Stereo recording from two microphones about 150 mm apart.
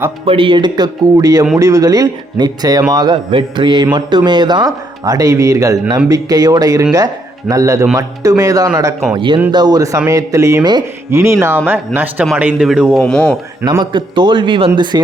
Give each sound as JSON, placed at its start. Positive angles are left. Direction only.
{"t": 0.3, "sound": "a man's voice", "side_deg": -35}
{"t": 13.7, "sound": "a man's voice", "side_deg": -30}